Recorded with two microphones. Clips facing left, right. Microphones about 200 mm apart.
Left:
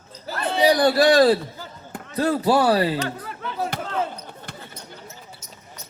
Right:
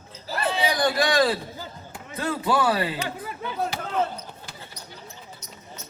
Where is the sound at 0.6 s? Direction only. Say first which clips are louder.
Left 8 dB; 35° left (ahead or behind).